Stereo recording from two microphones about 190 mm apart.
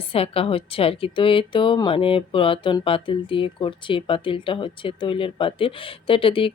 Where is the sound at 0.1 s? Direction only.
30° left (ahead or behind).